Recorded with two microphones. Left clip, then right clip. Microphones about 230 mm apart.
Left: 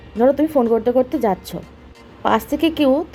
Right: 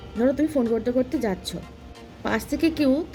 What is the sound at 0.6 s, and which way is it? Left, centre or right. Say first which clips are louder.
Speech: left 7 dB; left.